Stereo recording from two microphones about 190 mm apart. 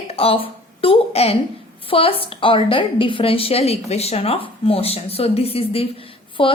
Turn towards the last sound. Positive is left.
turn(degrees=25)  # may be behind; listen again after turning